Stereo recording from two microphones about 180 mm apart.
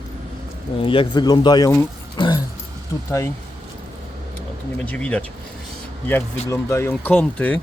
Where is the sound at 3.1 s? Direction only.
15° left (ahead or behind).